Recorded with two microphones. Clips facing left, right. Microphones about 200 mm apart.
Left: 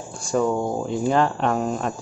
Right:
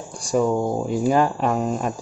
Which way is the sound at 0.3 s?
10° right (ahead or behind).